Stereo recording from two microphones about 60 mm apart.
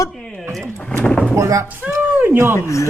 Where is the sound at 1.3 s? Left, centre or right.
Right.